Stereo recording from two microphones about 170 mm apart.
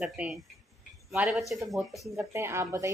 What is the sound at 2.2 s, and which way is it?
Speech, 15° right (ahead or behind).